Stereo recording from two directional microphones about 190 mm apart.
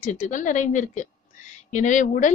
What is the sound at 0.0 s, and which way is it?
A woman's voice, 40° left (ahead or behind).